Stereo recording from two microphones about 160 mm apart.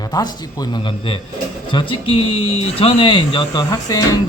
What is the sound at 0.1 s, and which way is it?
Speech, 25° left (ahead or behind).